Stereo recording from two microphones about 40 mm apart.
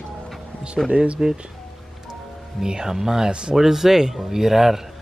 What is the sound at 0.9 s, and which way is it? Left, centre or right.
Speech, right.